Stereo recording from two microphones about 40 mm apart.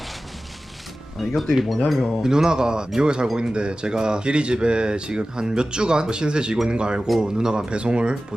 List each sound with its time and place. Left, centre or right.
1.2 s speech: centre
2.2 s a man's voice: centre